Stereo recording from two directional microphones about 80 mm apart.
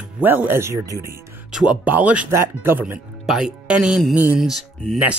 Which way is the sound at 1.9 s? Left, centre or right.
Centre.